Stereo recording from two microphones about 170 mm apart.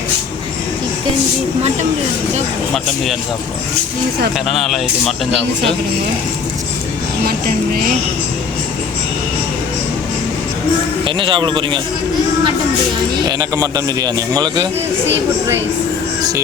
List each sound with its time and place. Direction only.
2.7 s speech: centre (ahead or behind)
4.4 s speech: centre (ahead or behind)
11.0 s a man's voice: 30° right (ahead or behind)
13.2 s a man's voice: 20° right (ahead or behind)